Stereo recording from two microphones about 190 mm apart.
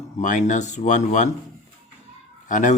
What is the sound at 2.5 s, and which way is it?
Speech, 40° left (ahead or behind).